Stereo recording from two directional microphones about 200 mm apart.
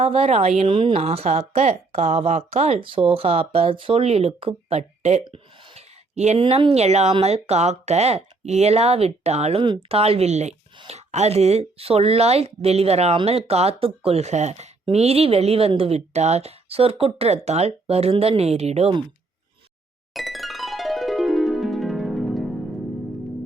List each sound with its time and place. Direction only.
0.0 s speech: 30° right (ahead or behind)
20.1 s music: centre (ahead or behind)